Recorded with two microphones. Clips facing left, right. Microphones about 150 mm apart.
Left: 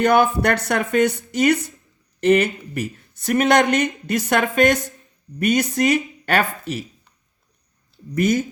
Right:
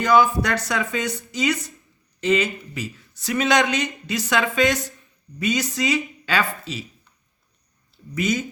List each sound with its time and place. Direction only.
0.0 s speech: 60° left (ahead or behind)
8.1 s speech: 55° left (ahead or behind)